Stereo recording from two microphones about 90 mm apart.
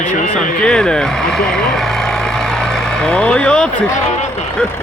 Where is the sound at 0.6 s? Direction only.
10° left (ahead or behind).